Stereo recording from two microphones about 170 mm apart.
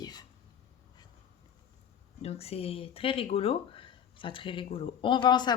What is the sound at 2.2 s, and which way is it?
Speech, 35° left (ahead or behind).